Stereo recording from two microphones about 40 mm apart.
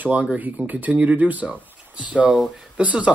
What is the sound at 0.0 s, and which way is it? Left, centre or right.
Speech, right.